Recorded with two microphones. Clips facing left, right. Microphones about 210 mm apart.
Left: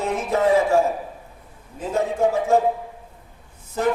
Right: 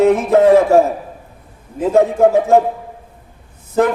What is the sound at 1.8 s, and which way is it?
Speech, 70° right (ahead or behind).